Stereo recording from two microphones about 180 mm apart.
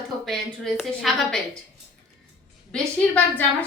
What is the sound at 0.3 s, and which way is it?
A woman's voice, centre (ahead or behind).